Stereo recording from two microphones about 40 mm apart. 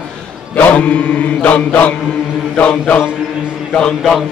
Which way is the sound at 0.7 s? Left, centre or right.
Left.